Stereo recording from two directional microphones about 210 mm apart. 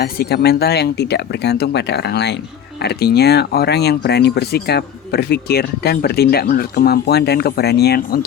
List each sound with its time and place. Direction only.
0.0 s speech: 50° left (ahead or behind)